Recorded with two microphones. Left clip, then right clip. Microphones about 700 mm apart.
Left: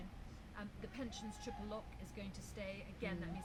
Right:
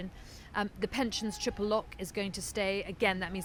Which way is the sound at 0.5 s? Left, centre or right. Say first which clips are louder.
Right 18 dB; right.